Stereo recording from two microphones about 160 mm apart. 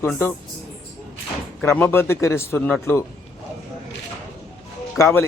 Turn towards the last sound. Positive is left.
turn(degrees=15)  # may be behind; listen again after turning